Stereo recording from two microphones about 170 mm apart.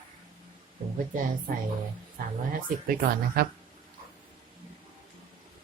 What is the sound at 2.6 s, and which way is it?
Speech, 55° right (ahead or behind).